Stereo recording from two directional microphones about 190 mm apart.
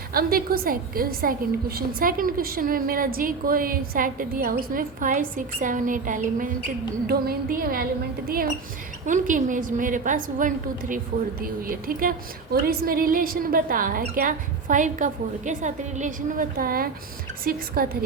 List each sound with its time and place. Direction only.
0.1 s a woman's voice: 50° right (ahead or behind)
9.0 s a woman's voice: 45° right (ahead or behind)